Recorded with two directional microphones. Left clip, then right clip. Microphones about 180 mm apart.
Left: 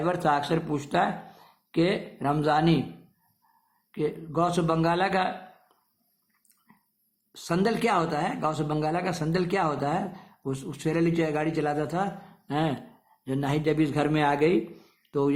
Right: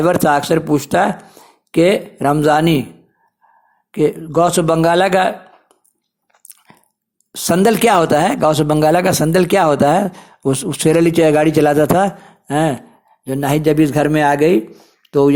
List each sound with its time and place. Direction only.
0.0 s speech: 45° right (ahead or behind)
3.9 s speech: 40° right (ahead or behind)
7.3 s speech: 45° right (ahead or behind)
15.0 s a sound: 35° right (ahead or behind)